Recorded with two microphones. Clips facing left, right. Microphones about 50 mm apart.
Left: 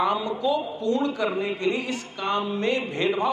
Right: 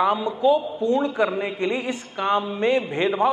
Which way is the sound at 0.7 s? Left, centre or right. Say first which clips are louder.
Right 4 dB; right.